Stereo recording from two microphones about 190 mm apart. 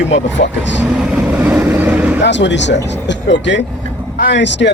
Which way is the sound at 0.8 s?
5° right (ahead or behind).